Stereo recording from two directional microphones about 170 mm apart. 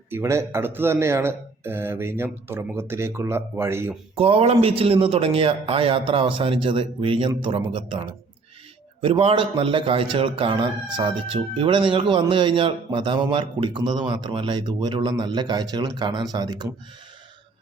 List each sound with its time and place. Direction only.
0.1 s speech: 15° right (ahead or behind)
4.1 s speech: 35° right (ahead or behind)